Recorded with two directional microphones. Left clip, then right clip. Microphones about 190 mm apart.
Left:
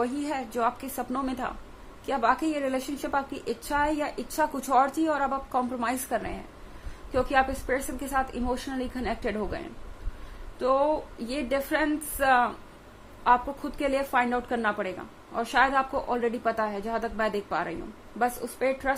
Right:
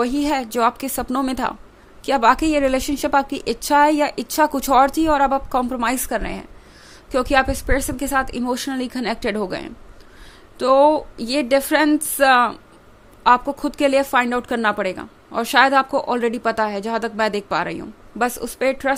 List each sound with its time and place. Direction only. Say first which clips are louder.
0.0 s a woman's voice: right 9 dB; 45° right (ahead or behind)